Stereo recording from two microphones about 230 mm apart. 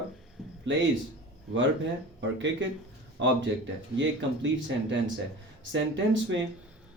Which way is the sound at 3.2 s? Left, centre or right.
Right.